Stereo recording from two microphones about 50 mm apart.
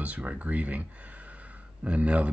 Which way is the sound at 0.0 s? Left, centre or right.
Right.